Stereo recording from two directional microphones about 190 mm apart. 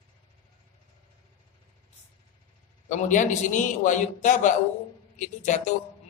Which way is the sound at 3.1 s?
40° left (ahead or behind).